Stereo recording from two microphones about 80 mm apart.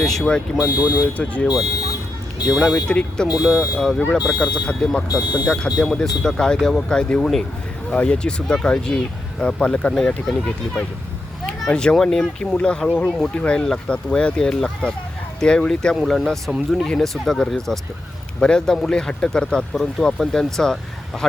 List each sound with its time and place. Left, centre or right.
0.0 s speech: centre
0.5 s speech: centre
1.1 s speech: centre
2.5 s speech: centre
2.8 s speech: centre
3.3 s speech: centre
3.8 s speech: centre